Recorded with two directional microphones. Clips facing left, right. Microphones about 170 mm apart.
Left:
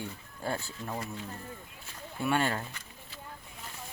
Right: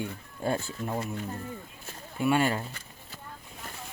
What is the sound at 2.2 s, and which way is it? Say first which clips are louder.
Speech: right 4 dB; 10° right (ahead or behind).